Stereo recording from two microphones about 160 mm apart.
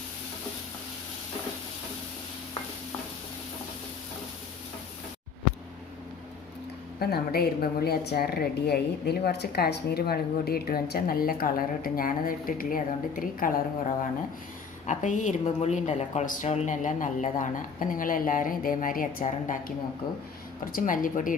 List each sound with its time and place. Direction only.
7.0 s a woman's voice: 75° left (ahead or behind)
14.8 s a woman's voice: 50° left (ahead or behind)